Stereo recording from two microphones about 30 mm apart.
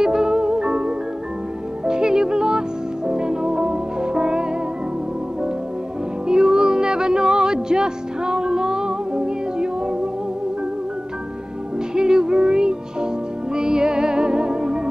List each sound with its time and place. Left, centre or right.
0.0 s music: right
6.2 s music: right
11.9 s music: right